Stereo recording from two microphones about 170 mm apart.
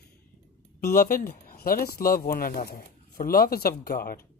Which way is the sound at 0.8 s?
60° left (ahead or behind).